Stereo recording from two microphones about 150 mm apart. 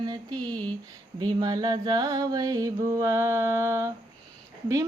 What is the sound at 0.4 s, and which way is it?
Speech, 10° left (ahead or behind).